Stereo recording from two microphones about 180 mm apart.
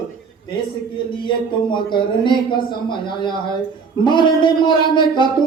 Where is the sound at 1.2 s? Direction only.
25° left (ahead or behind).